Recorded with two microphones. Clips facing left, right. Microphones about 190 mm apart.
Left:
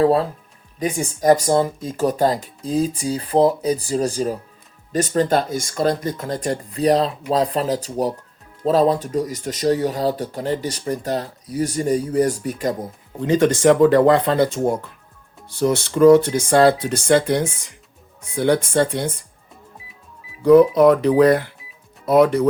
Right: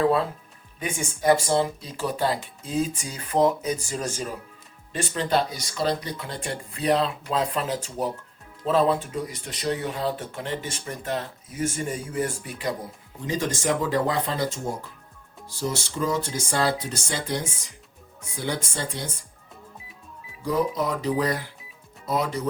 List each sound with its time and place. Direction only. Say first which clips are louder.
0.0 s speech: left 5 dB; 40° left (ahead or behind)
13.1 s speech: left 11 dB; 65° left (ahead or behind)
20.4 s speech: left 14 dB; 65° left (ahead or behind)